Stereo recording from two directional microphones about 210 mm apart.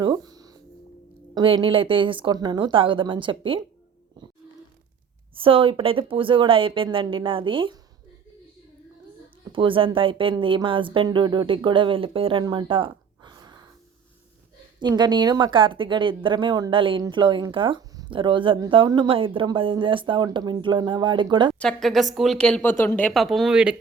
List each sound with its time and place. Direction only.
0.0 s music: 20° right (ahead or behind)
1.3 s a woman's voice: 20° right (ahead or behind)
5.3 s a woman's voice: 25° right (ahead or behind)
9.5 s a woman's voice: 25° right (ahead or behind)
14.8 s a woman's voice: 20° right (ahead or behind)
21.6 s speech: centre (ahead or behind)